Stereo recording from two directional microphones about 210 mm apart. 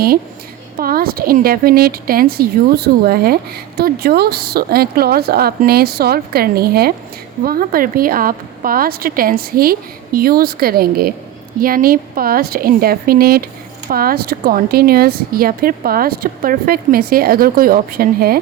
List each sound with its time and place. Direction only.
0.8 s speech: 45° right (ahead or behind)